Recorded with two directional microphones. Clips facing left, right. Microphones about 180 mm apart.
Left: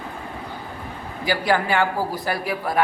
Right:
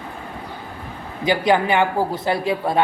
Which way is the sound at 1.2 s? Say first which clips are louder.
Right 4 dB; 20° right (ahead or behind).